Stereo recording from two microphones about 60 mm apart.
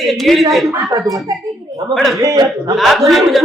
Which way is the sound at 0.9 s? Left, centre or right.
Right.